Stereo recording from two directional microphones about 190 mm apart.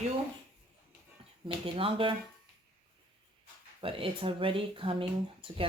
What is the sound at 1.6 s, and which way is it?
Speech, 25° right (ahead or behind).